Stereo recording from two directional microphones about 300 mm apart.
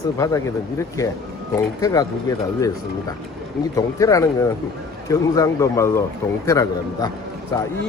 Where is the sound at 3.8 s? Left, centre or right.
Centre.